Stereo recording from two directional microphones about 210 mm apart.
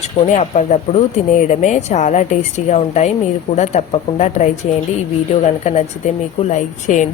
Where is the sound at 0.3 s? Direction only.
30° left (ahead or behind).